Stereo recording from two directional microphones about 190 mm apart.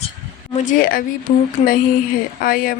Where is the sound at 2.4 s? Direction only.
50° left (ahead or behind).